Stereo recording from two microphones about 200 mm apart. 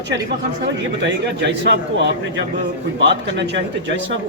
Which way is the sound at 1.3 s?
60° right (ahead or behind).